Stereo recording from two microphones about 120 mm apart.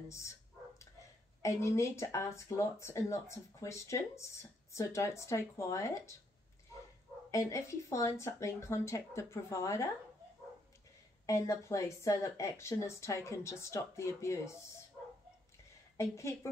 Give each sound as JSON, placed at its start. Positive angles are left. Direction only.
{"t": 1.4, "sound": "speech", "side_deg": 25}
{"t": 7.2, "sound": "speech", "side_deg": 25}
{"t": 11.2, "sound": "speech", "side_deg": 25}
{"t": 16.0, "sound": "speech", "side_deg": 25}